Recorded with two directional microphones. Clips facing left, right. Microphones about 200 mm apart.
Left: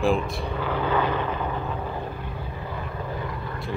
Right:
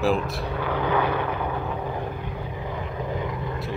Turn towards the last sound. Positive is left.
turn(degrees=-20)  # may be behind; listen again after turning